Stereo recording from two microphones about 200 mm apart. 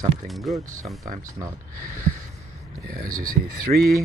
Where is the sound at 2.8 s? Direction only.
45° right (ahead or behind).